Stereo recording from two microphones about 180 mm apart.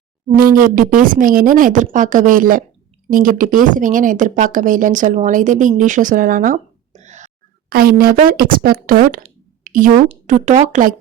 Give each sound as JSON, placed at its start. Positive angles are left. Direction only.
{"t": 0.3, "sound": "speech", "side_deg": -50}
{"t": 7.7, "sound": "speech", "side_deg": -55}